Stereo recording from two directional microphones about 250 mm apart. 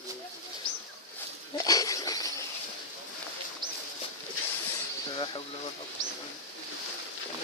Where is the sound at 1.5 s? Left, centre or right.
Centre.